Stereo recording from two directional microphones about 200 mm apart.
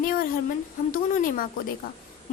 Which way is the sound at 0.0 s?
45° left (ahead or behind).